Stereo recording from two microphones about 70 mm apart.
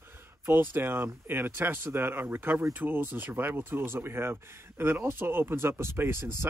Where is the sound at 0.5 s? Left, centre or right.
Right.